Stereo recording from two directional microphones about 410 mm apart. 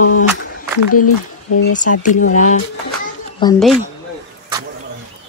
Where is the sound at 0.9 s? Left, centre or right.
Left.